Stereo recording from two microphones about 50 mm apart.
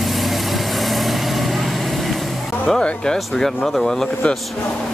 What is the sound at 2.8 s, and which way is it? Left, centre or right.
Music, centre.